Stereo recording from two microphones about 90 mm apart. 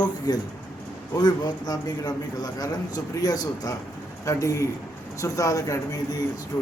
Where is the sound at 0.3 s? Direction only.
45° left (ahead or behind).